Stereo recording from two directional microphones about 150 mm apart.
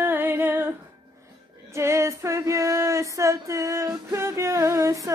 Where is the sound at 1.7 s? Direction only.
20° right (ahead or behind).